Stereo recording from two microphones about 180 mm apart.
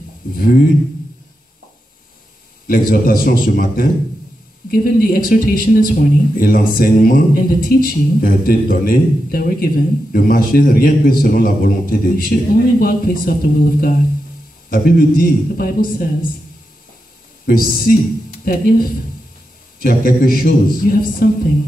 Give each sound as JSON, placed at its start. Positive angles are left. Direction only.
{"t": 0.3, "sound": "speech", "side_deg": 50}
{"t": 2.6, "sound": "speech", "side_deg": 50}
{"t": 17.5, "sound": "speech", "side_deg": 50}